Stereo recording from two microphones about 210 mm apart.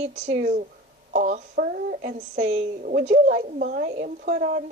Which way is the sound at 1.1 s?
40° right (ahead or behind).